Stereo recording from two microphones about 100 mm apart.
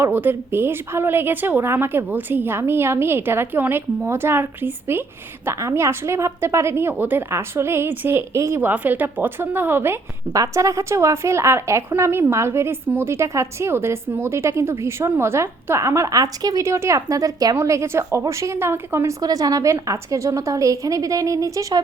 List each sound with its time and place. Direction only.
0.0 s a woman's voice: 20° right (ahead or behind)
10.3 s a woman's voice: 30° right (ahead or behind)
19.2 s a woman's voice: 40° right (ahead or behind)